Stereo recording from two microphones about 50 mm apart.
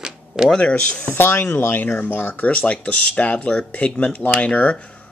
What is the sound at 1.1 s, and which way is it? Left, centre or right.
Speech, left.